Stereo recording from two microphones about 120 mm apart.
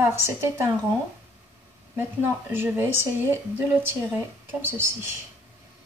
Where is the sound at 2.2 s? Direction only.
15° right (ahead or behind).